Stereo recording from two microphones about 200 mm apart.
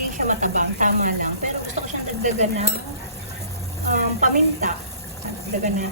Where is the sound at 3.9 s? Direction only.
40° right (ahead or behind).